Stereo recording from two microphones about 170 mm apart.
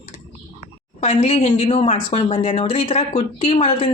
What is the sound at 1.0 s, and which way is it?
Speech, 35° left (ahead or behind).